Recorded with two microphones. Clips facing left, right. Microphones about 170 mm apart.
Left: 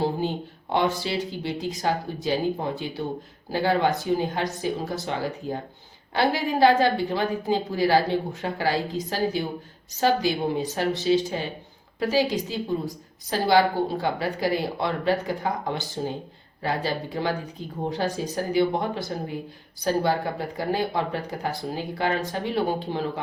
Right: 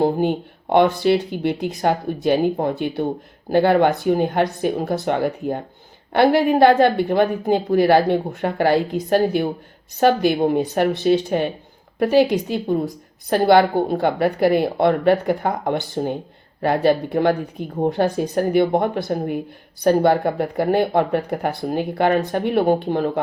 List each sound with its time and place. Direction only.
0.0 s speech: 60° right (ahead or behind)